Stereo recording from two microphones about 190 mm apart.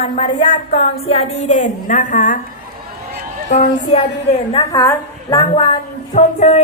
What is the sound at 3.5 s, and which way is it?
Speech, 35° left (ahead or behind).